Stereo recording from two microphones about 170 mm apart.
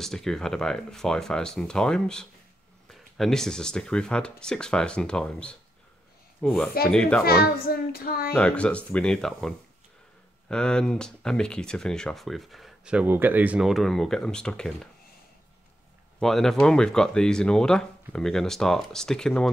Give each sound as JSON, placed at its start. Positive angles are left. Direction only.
{"t": 0.0, "sound": "speech", "side_deg": 0}
{"t": 7.2, "sound": "a child's voice", "side_deg": 60}
{"t": 8.3, "sound": "speech", "side_deg": 5}
{"t": 16.2, "sound": "speech", "side_deg": 0}